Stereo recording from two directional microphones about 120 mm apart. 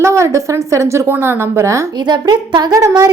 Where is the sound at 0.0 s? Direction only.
25° right (ahead or behind).